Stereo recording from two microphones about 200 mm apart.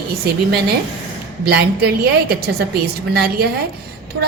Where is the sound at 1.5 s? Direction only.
55° right (ahead or behind).